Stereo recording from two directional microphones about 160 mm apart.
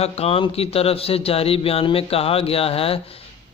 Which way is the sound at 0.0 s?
40° left (ahead or behind).